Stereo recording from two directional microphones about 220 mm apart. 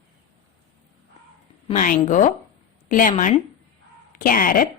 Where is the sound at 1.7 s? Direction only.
35° left (ahead or behind).